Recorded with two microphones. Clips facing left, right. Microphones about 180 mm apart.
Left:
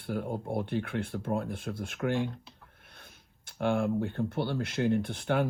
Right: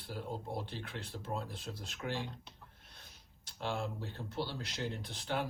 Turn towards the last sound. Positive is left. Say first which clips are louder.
# left 9 dB
turn(degrees=55)  # may be behind; listen again after turning